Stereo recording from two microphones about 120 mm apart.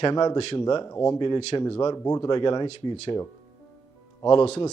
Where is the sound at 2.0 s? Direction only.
25° left (ahead or behind).